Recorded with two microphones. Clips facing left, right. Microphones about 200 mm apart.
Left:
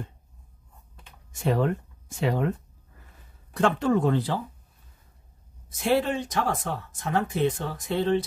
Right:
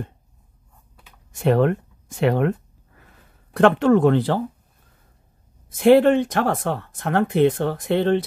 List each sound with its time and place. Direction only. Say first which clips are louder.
1.3 s speech: right 7 dB; 65° right (ahead or behind)
3.5 s speech: right 7 dB; 65° right (ahead or behind)
5.7 s speech: right 11 dB; 55° right (ahead or behind)